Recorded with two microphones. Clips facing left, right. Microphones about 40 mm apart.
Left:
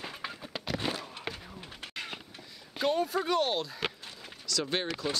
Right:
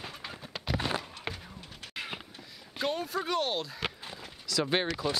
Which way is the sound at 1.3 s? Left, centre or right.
Centre.